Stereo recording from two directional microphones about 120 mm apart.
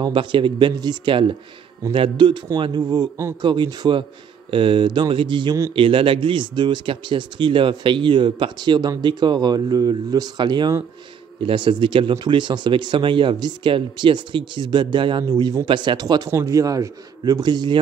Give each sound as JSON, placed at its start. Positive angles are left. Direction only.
{"t": 0.0, "sound": "speech", "side_deg": -45}